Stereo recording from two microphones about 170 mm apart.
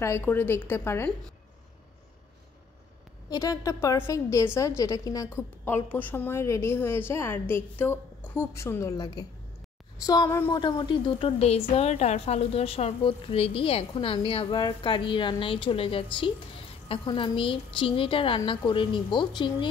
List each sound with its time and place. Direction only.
0.0 s a woman's voice: 15° left (ahead or behind)
3.3 s a woman's voice: 20° left (ahead or behind)